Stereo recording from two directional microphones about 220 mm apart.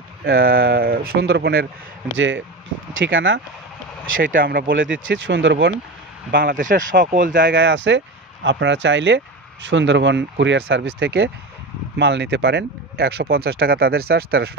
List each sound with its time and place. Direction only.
0.2 s speech: 45° right (ahead or behind)
2.1 s speech: 60° right (ahead or behind)
4.2 s speech: 40° right (ahead or behind)
4.7 s speech: 60° right (ahead or behind)
6.3 s speech: 40° right (ahead or behind)
7.5 s speech: 55° right (ahead or behind)